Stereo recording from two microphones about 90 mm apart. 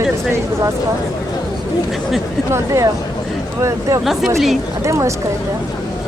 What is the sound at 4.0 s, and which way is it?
Speech, 5° right (ahead or behind).